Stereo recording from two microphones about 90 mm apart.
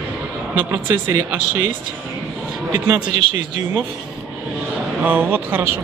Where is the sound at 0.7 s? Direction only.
30° right (ahead or behind).